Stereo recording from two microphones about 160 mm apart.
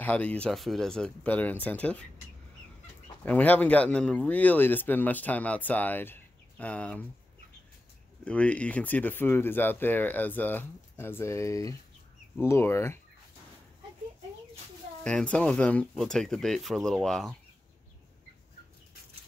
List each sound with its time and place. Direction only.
0.0 s speech: 10° left (ahead or behind)
3.3 s speech: 10° left (ahead or behind)
8.3 s speech: 10° left (ahead or behind)
15.0 s speech: 5° left (ahead or behind)